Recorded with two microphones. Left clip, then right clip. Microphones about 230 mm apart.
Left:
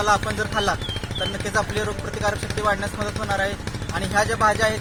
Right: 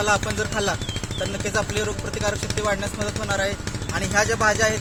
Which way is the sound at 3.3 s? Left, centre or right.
Centre.